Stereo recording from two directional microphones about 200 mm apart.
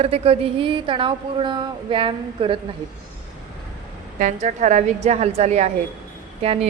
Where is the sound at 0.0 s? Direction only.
30° right (ahead or behind).